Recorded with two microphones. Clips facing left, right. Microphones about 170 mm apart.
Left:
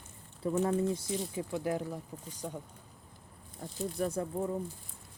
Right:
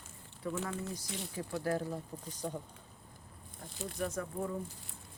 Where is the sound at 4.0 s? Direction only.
35° left (ahead or behind).